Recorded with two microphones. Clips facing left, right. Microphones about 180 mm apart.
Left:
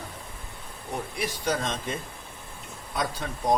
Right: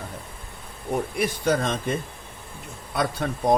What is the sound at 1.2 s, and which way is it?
Speech, 55° right (ahead or behind).